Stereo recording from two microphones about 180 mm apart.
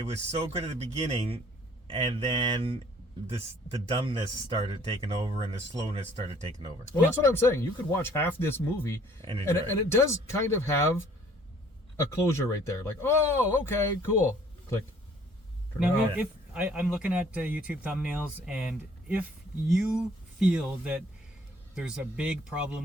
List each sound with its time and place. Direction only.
0.3 s speech: 35° right (ahead or behind)
3.8 s speech: 30° right (ahead or behind)
6.9 s speech: 15° left (ahead or behind)
12.2 s speech: 15° left (ahead or behind)
15.8 s speech: 5° right (ahead or behind)